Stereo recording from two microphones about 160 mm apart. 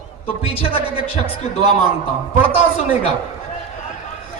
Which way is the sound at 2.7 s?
35° left (ahead or behind).